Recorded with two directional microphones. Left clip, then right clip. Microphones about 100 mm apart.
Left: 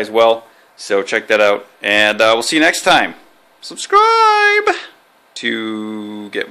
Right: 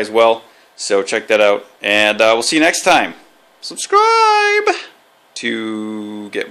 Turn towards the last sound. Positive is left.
turn(degrees=-10)  # may be behind; listen again after turning